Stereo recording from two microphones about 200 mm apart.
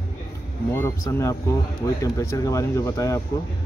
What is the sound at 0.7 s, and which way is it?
Speech, 15° left (ahead or behind).